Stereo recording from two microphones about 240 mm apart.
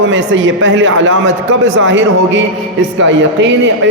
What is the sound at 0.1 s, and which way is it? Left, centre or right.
A man's voice, right.